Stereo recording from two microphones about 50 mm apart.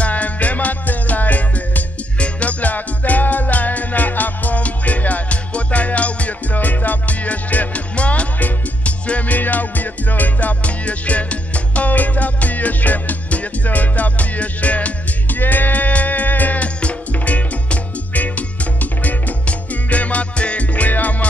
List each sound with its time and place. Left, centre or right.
0.0 s music: left